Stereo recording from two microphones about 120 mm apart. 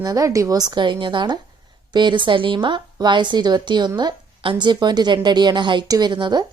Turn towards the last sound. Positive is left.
turn(degrees=-40)  # may be behind; listen again after turning